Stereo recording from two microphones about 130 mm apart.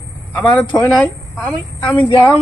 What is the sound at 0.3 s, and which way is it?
A man's voice, 10° left (ahead or behind).